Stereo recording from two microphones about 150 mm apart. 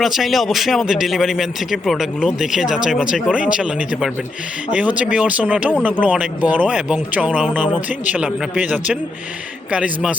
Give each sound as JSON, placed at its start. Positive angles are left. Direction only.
{"t": 0.0, "sound": "a man's voice", "side_deg": 0}